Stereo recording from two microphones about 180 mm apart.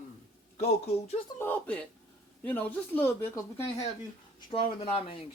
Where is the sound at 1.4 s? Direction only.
10° left (ahead or behind).